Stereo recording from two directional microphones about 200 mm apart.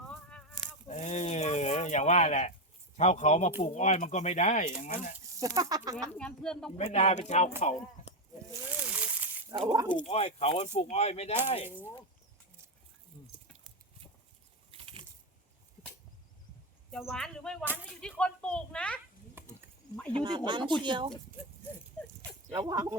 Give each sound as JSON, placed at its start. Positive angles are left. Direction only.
{"t": 0.9, "sound": "a sound", "side_deg": 35}
{"t": 3.0, "sound": "speech", "side_deg": 35}
{"t": 5.4, "sound": "speech", "side_deg": -20}
{"t": 6.1, "sound": "speech", "side_deg": 5}
{"t": 6.7, "sound": "speech", "side_deg": 35}
{"t": 8.4, "sound": "a sound", "side_deg": -5}
{"t": 9.5, "sound": "speech", "side_deg": -20}
{"t": 10.1, "sound": "speech", "side_deg": 30}
{"t": 14.7, "sound": "a sound", "side_deg": -25}
{"t": 16.9, "sound": "speech", "side_deg": 0}
{"t": 19.4, "sound": "wild animals", "side_deg": -10}
{"t": 20.1, "sound": "speech", "side_deg": -20}
{"t": 22.5, "sound": "speech", "side_deg": -20}